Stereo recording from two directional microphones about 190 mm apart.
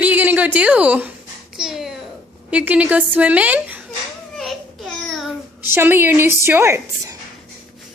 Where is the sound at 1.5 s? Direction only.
5° right (ahead or behind).